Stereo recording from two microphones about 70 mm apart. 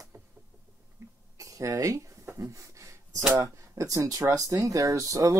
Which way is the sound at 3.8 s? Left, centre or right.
Right.